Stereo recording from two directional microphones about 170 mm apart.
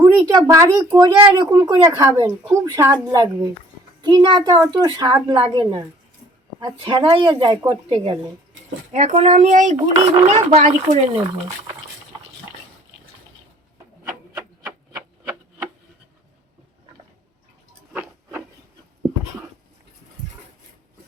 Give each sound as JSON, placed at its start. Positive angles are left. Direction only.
{"t": 0.0, "sound": "speech", "side_deg": -20}
{"t": 8.9, "sound": "a child's voice", "side_deg": -45}
{"t": 17.9, "sound": "a sound", "side_deg": -10}